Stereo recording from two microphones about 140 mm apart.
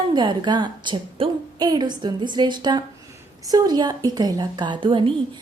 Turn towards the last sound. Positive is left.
turn(degrees=-35)  # may be behind; listen again after turning